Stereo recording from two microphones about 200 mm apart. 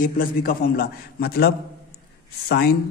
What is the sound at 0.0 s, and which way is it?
A man's voice, 45° left (ahead or behind).